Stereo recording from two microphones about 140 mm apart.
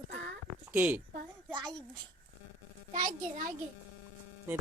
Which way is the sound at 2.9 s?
75° right (ahead or behind).